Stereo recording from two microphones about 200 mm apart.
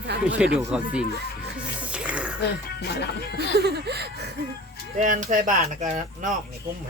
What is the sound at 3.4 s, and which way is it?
Speech, 55° right (ahead or behind).